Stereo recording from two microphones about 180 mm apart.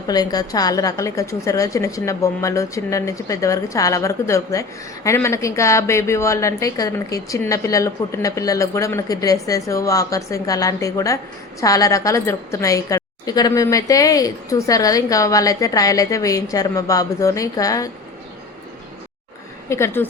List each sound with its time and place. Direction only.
0.1 s a woman's voice: 20° left (ahead or behind)
19.6 s a woman's voice: 15° left (ahead or behind)